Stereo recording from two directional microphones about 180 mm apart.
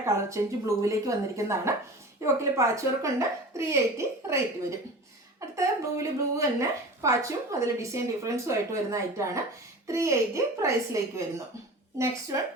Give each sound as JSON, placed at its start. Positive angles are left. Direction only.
{"t": 0.0, "sound": "a woman's voice", "side_deg": -15}
{"t": 5.5, "sound": "a woman's voice", "side_deg": -15}